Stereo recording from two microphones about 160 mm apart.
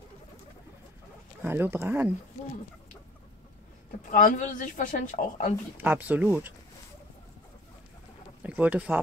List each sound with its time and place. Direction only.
1.4 s speech: 15° right (ahead or behind)
4.1 s speech: 55° left (ahead or behind)
5.8 s speech: 10° right (ahead or behind)
8.4 s speech: 10° right (ahead or behind)